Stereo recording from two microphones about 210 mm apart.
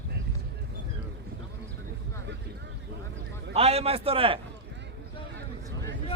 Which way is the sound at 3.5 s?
30° right (ahead or behind).